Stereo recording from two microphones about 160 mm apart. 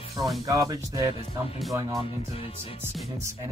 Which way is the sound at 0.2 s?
20° right (ahead or behind).